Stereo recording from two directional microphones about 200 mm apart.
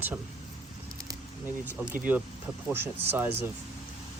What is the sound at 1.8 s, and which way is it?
Speech, 10° right (ahead or behind).